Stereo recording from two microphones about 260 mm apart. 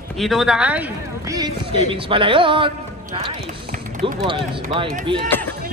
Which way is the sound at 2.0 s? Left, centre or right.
Centre.